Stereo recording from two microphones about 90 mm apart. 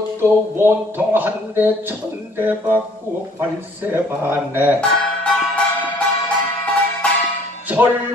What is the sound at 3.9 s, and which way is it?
Speech, 20° right (ahead or behind).